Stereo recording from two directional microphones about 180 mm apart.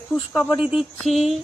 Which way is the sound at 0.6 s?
5° right (ahead or behind).